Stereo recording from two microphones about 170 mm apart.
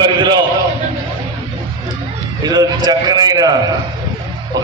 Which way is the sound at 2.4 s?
25° right (ahead or behind).